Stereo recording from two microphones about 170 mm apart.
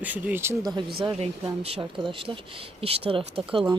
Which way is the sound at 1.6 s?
35° right (ahead or behind).